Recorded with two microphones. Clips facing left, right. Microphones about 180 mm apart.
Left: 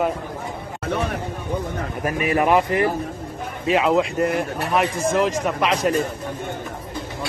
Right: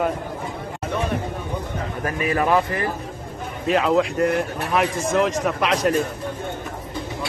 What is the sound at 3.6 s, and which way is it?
Speech, centre (ahead or behind).